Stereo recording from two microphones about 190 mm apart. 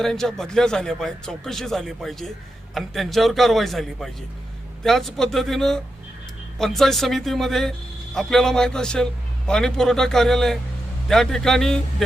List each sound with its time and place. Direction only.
0.0 s speech: centre (ahead or behind)